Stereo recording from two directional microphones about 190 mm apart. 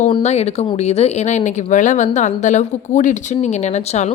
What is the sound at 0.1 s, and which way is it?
A woman's voice, 35° left (ahead or behind).